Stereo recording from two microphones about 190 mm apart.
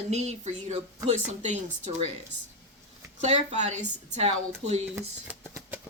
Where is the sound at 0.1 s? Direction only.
35° right (ahead or behind).